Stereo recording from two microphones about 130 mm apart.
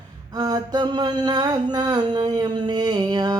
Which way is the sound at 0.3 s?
30° right (ahead or behind).